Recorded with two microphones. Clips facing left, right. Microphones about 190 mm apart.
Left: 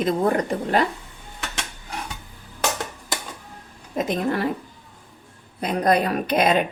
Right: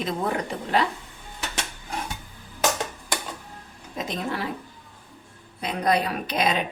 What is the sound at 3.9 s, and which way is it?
Speech, 50° left (ahead or behind).